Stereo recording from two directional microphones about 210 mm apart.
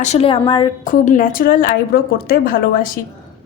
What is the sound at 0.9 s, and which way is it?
A woman's voice, 40° left (ahead or behind).